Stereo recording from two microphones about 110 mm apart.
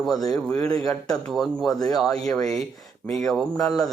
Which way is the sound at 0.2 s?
35° left (ahead or behind).